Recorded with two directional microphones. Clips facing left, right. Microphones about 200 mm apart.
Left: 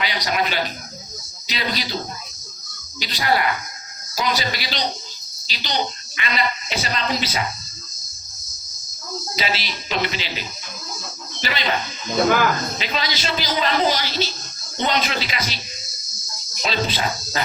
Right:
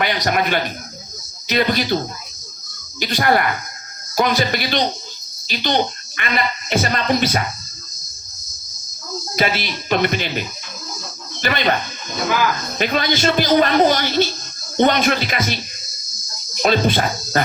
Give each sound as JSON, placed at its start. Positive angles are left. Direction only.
{"t": 0.3, "sound": "speech", "side_deg": -55}
{"t": 3.0, "sound": "speech", "side_deg": -50}
{"t": 9.3, "sound": "speech", "side_deg": -55}
{"t": 12.8, "sound": "speech", "side_deg": -55}
{"t": 16.6, "sound": "speech", "side_deg": -55}